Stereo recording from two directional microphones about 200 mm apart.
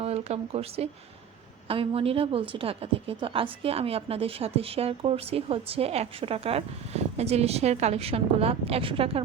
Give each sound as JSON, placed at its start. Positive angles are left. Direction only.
{"t": 0.0, "sound": "a woman's voice", "side_deg": -30}